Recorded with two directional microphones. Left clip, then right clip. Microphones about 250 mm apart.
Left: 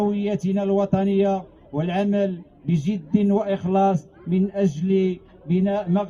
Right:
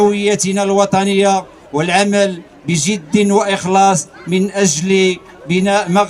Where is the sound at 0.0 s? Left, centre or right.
Centre.